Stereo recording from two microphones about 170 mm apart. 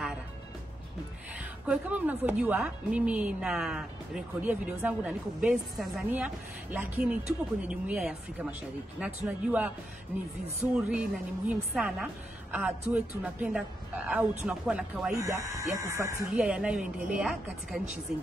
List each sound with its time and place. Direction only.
1.7 s a woman's voice: 10° right (ahead or behind)
10.9 s a woman's voice: 5° right (ahead or behind)
15.1 s speech: 20° right (ahead or behind)
16.3 s speech: 5° right (ahead or behind)